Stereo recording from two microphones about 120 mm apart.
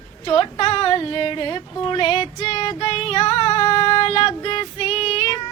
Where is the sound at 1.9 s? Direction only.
45° left (ahead or behind).